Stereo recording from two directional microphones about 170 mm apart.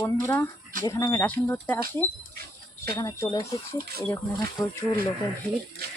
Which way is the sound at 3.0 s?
20° left (ahead or behind).